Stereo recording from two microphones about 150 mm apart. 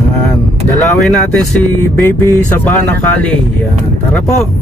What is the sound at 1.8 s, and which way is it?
Music, 20° left (ahead or behind).